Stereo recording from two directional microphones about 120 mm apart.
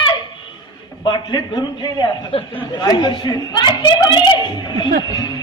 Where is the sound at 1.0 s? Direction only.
35° left (ahead or behind).